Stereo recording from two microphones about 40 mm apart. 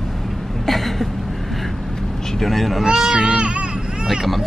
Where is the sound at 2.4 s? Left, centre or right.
Centre.